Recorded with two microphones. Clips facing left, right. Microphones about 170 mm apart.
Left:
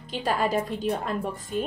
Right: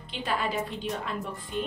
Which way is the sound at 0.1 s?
45° left (ahead or behind).